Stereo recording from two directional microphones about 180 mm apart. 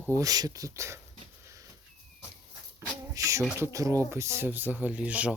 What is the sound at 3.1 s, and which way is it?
Speech, 15° right (ahead or behind).